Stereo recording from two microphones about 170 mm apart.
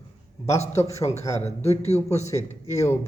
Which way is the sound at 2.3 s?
20° left (ahead or behind).